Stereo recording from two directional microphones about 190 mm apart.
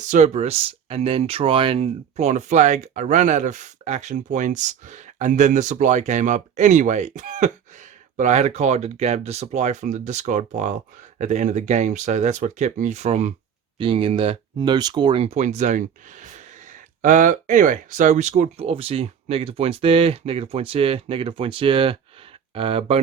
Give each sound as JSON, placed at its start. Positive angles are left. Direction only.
{"t": 0.0, "sound": "speech", "side_deg": -40}